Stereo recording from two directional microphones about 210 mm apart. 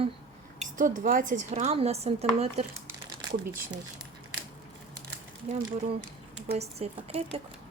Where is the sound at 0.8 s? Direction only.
40° right (ahead or behind).